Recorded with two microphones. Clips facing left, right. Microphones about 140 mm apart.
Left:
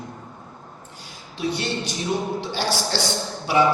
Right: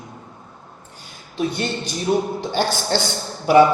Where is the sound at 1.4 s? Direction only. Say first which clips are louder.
Right 2 dB; 50° right (ahead or behind).